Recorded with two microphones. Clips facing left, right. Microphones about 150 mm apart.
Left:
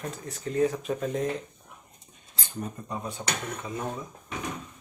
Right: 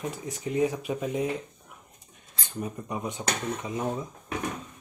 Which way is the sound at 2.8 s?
15° right (ahead or behind).